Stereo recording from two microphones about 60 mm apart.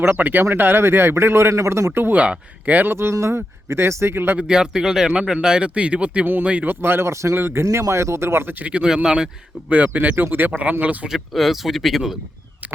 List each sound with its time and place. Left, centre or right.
0.0 s speech: right
2.1 s speech: right
2.9 s speech: right
4.4 s speech: centre
6.7 s speech: right
8.6 s speech: centre
9.6 s speech: right
10.2 s speech: right
11.3 s speech: centre